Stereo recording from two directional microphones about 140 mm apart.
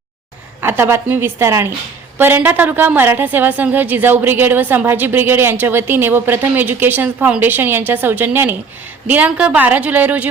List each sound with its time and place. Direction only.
0.6 s a woman's voice: 15° right (ahead or behind)